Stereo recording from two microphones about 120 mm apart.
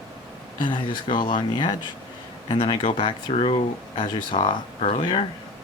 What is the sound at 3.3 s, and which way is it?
Speech, 55° left (ahead or behind).